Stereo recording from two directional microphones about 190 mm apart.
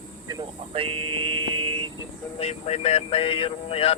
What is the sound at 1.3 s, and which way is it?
Vehicle, 90° right.